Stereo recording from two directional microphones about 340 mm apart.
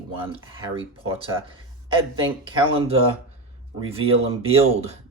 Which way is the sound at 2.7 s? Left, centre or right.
Centre.